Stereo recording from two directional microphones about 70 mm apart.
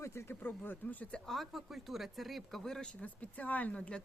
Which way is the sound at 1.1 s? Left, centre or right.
Centre.